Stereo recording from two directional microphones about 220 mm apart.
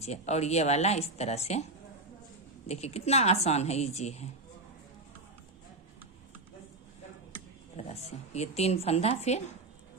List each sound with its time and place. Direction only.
0.0 s speech: 30° left (ahead or behind)
2.6 s speech: 30° left (ahead or behind)
7.8 s speech: 30° left (ahead or behind)